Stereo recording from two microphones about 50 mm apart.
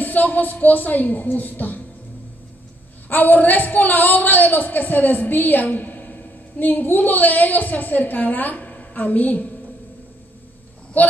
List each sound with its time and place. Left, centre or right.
0.0 s a woman's voice: left
3.1 s a woman's voice: left
10.9 s a woman's voice: left